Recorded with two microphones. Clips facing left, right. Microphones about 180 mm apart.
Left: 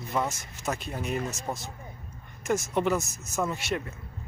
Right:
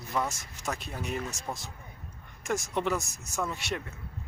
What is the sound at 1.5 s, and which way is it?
Speech, 20° left (ahead or behind).